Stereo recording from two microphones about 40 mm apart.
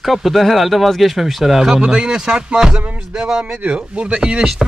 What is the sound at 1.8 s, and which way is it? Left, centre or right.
Speech, centre.